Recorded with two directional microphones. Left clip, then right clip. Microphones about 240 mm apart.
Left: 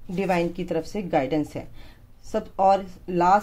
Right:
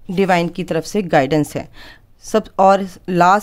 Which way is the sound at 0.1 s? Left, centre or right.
Right.